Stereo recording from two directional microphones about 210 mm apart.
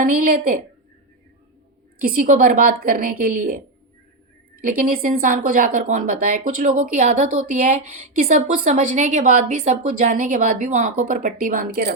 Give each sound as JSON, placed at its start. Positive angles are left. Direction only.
{"t": 0.0, "sound": "a woman's voice", "side_deg": -40}
{"t": 2.0, "sound": "a woman's voice", "side_deg": -45}
{"t": 4.8, "sound": "a woman's voice", "side_deg": -40}